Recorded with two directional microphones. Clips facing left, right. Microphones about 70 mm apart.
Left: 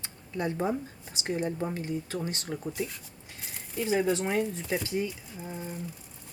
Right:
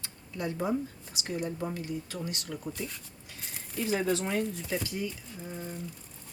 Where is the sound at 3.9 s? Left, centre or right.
Centre.